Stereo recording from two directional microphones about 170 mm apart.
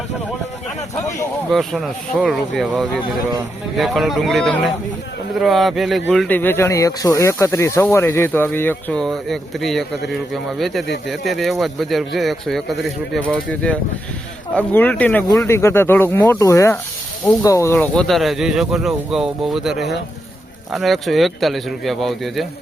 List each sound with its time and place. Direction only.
0.9 s speech: 20° left (ahead or behind)
1.5 s speech: centre (ahead or behind)